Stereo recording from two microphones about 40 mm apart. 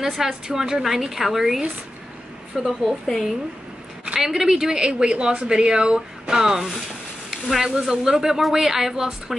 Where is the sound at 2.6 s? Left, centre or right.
Centre.